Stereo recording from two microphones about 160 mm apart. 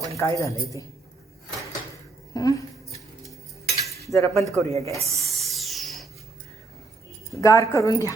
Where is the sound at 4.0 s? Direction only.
20° left (ahead or behind).